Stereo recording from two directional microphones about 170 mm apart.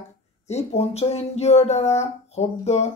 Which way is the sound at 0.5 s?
40° left (ahead or behind).